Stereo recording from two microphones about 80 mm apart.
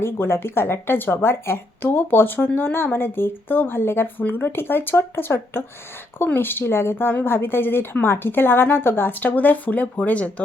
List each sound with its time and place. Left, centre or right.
0.0 s a woman's voice: left